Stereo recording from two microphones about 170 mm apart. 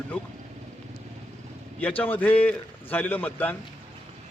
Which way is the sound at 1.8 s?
10° left (ahead or behind).